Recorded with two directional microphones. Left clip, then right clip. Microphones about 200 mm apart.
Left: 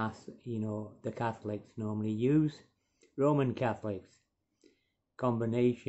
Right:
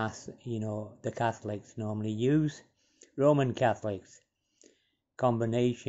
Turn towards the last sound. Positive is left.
turn(degrees=-20)  # may be behind; listen again after turning